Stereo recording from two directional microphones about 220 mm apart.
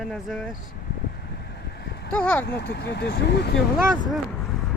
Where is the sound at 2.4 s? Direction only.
50° left (ahead or behind).